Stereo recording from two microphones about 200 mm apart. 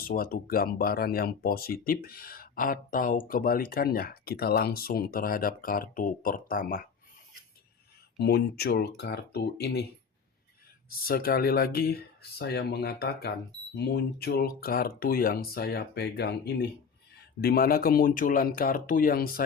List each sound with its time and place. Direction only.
0.0 s speech: 45° left (ahead or behind)
8.2 s speech: 55° left (ahead or behind)
10.8 s speech: 50° left (ahead or behind)
17.4 s speech: 50° left (ahead or behind)